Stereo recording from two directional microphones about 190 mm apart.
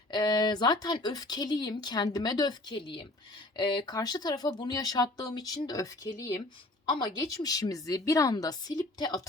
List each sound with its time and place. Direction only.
0.1 s speech: 20° left (ahead or behind)